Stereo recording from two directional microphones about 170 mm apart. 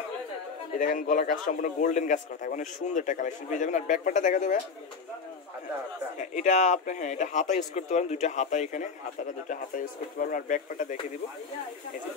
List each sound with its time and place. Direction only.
0.7 s speech: 55° left (ahead or behind)
6.1 s speech: 45° left (ahead or behind)